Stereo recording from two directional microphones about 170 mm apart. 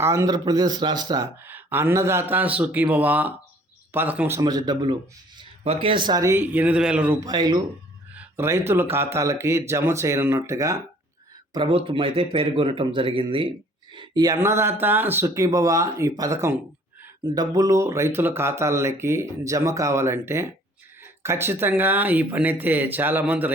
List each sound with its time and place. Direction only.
0.0 s speech: 15° right (ahead or behind)
4.4 s a man's voice: 25° right (ahead or behind); by 7.2 s 10° right (ahead or behind)
7.2 s a man's voice: 25° right (ahead or behind)
8.1 s speech: 10° right (ahead or behind)
11.5 s speech: 30° right (ahead or behind); by 23.5 s 10° right (ahead or behind)